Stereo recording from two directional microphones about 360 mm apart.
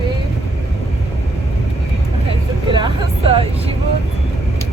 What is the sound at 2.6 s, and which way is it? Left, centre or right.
Vehicle, centre.